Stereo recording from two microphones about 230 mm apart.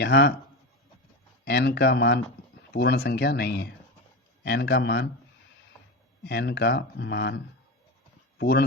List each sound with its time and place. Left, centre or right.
0.0 s speech: left
1.5 s speech: left
6.2 s speech: left